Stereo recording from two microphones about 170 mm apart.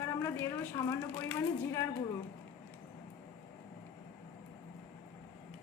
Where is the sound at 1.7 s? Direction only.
15° left (ahead or behind).